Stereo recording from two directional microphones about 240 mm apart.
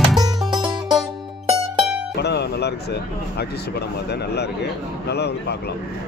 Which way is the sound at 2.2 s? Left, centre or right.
Left.